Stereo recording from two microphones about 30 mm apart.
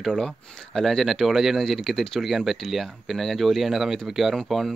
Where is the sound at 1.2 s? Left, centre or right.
Centre.